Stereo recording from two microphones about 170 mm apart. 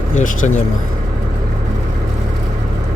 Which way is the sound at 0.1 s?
45° left (ahead or behind).